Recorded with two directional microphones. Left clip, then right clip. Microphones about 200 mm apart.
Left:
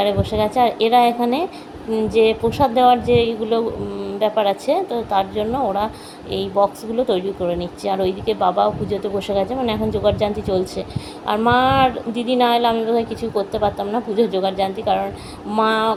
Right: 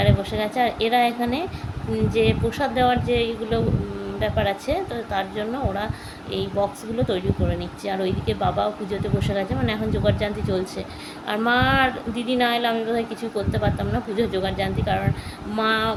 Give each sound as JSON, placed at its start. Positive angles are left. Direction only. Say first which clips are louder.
{"t": 0.0, "sound": "a woman's voice", "louder": "left 5 dB", "side_deg": 15}